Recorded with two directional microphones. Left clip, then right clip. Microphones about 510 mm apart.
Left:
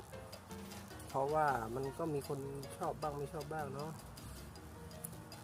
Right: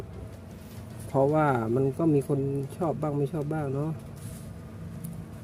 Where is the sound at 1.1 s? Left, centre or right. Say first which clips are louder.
Right 10 dB; left.